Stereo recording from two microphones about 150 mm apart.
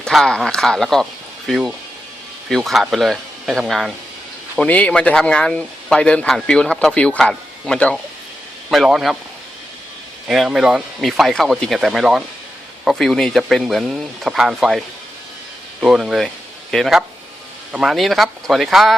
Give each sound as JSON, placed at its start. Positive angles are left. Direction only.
{"t": 0.0, "sound": "speech", "side_deg": 5}
{"t": 10.2, "sound": "speech", "side_deg": 0}